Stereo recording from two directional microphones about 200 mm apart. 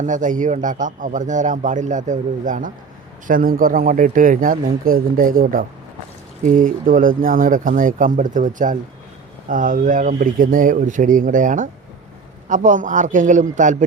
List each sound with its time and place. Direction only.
0.0 s a man's voice: 40° right (ahead or behind)